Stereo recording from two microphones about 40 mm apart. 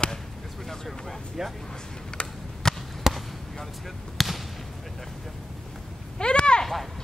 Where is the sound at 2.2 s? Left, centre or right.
Left.